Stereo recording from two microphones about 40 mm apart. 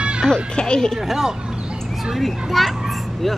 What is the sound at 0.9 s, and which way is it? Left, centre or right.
A child's voice, centre.